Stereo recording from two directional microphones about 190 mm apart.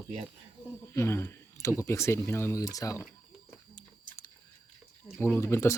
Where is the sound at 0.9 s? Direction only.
15° left (ahead or behind).